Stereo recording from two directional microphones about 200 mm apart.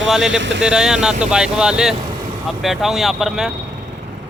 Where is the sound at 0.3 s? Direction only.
65° right (ahead or behind).